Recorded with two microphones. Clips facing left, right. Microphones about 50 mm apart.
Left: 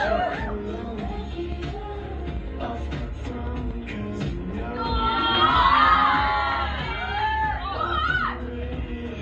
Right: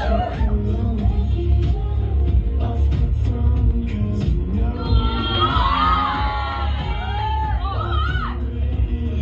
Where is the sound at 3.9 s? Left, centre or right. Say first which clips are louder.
Right 5 dB; left.